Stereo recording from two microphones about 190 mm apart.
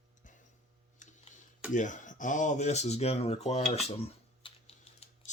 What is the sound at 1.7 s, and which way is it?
Speech, 40° left (ahead or behind).